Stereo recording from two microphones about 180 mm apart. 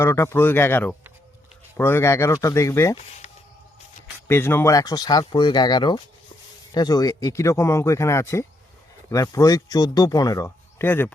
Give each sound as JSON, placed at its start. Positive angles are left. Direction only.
{"t": 0.0, "sound": "speech", "side_deg": 15}
{"t": 4.3, "sound": "speech", "side_deg": 10}